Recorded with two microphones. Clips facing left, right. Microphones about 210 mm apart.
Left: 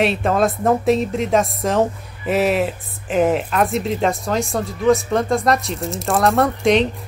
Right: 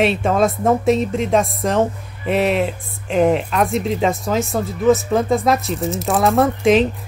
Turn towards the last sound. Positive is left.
turn(degrees=0)  # may be behind; listen again after turning